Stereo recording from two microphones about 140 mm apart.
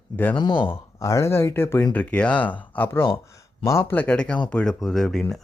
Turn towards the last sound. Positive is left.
turn(degrees=5)  # may be behind; listen again after turning